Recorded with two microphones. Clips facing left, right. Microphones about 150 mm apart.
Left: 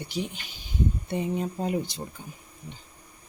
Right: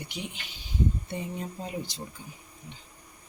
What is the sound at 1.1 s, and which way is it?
Speech, 65° left (ahead or behind).